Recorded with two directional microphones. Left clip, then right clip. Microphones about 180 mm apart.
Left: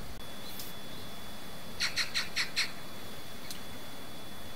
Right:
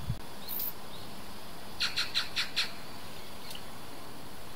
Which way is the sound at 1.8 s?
55° left (ahead or behind).